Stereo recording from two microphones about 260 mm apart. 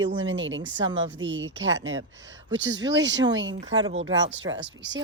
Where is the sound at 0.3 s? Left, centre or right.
Right.